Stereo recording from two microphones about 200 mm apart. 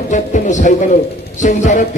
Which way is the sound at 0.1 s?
40° left (ahead or behind).